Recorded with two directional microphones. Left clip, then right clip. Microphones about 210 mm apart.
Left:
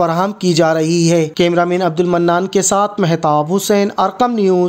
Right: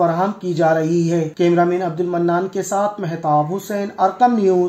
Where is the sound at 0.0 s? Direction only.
35° left (ahead or behind).